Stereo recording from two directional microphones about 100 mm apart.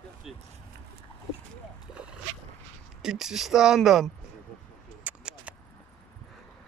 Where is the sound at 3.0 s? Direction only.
5° right (ahead or behind).